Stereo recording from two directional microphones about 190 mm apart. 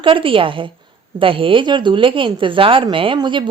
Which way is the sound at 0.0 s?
25° right (ahead or behind).